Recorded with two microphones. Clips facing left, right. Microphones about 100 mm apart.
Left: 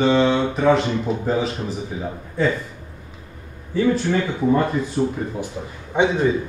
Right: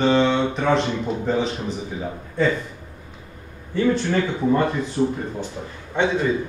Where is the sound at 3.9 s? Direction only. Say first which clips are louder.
Left 1 dB; 5° left (ahead or behind).